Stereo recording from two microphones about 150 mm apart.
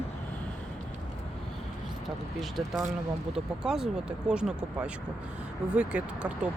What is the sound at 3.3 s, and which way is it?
Speech, 5° right (ahead or behind).